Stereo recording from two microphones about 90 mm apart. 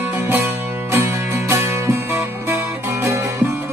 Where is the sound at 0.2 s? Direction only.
25° right (ahead or behind).